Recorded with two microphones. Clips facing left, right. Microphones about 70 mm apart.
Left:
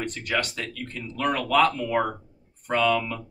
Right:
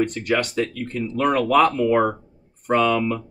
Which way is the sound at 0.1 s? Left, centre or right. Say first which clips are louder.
Right 6 dB; right.